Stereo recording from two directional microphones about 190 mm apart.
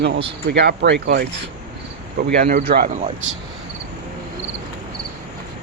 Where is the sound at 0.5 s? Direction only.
60° right (ahead or behind).